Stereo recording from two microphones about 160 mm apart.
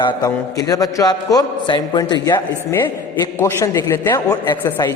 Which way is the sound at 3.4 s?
15° left (ahead or behind).